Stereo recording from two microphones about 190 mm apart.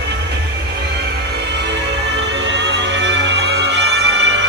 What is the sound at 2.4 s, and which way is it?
Music, 65° right (ahead or behind).